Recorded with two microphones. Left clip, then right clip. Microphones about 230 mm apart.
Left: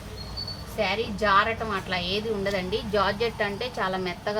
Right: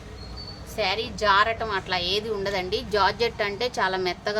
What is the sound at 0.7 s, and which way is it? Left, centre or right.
A woman's voice, right.